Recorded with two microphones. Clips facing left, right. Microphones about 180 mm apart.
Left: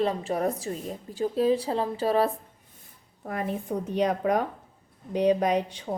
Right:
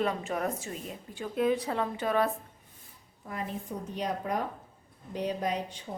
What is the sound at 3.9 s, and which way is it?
Speech, 80° left.